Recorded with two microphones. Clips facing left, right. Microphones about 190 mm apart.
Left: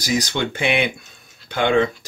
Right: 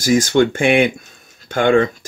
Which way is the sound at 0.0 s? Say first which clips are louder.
Right 8 dB; 50° right (ahead or behind).